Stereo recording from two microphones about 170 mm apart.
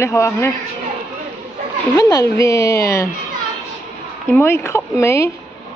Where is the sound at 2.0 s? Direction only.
20° left (ahead or behind).